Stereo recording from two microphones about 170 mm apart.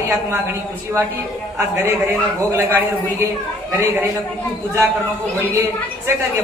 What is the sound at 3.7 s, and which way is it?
Speech, 15° right (ahead or behind).